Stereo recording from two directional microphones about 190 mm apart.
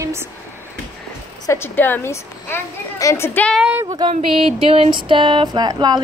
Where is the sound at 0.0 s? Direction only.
15° right (ahead or behind).